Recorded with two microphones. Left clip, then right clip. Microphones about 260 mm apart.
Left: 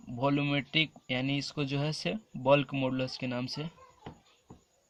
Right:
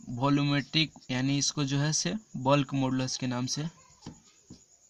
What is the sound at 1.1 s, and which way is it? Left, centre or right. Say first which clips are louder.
Speech: right 3 dB; right.